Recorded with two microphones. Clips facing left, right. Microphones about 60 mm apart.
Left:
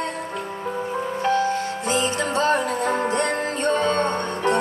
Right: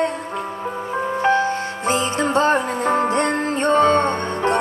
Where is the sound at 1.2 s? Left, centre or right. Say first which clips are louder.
Right 2 dB; right.